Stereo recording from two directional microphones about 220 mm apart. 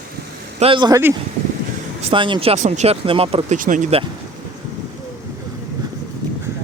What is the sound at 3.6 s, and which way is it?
Speech, 35° right (ahead or behind).